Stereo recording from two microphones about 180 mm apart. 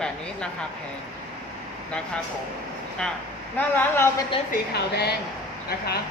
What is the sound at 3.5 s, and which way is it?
Speech, 10° left (ahead or behind).